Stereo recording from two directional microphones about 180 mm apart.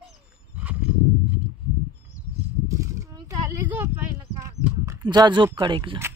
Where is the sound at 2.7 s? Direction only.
20° right (ahead or behind).